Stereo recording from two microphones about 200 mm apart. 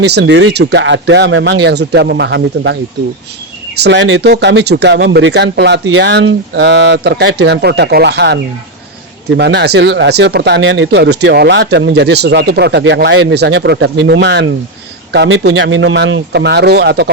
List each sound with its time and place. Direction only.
0.0 s speech: 55° right (ahead or behind)
3.8 s speech: 55° right (ahead or behind)